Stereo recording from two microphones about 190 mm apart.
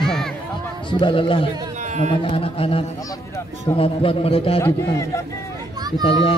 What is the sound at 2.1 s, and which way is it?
A man's voice, 30° left (ahead or behind).